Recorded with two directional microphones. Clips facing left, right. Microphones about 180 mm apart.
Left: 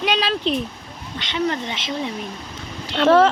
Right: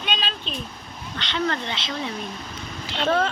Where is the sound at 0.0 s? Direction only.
75° left (ahead or behind).